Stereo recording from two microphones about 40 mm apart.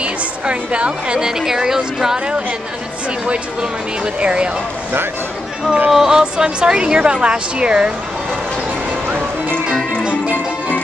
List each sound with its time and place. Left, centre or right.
0.0 s a woman's voice: right
1.2 s speech: centre
4.2 s speech: right
5.9 s speech: centre
6.3 s speech: right